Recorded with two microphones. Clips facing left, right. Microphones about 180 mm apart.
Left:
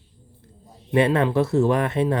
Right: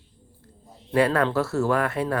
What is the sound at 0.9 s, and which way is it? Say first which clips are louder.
Speech: left 2 dB; 20° left (ahead or behind).